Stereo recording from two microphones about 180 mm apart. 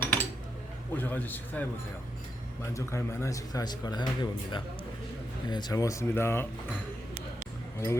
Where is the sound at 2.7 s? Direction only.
15° left (ahead or behind).